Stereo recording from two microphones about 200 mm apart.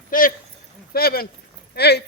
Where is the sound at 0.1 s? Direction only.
45° left (ahead or behind).